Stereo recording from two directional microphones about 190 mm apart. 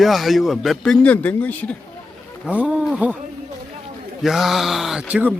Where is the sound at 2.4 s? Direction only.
5° right (ahead or behind).